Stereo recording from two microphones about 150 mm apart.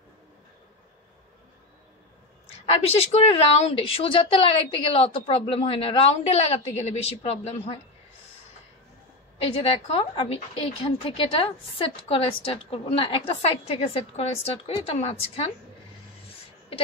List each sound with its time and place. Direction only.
2.6 s a woman's voice: 40° left (ahead or behind)
9.4 s a woman's voice: 40° left (ahead or behind)